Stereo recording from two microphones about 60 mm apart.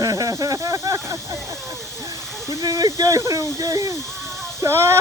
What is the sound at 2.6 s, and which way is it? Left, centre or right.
Speech, right.